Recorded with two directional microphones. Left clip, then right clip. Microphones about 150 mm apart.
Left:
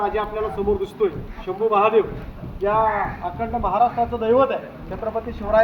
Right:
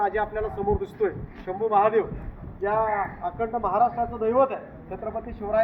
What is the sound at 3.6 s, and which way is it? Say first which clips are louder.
Speech: left 4 dB; 85° left.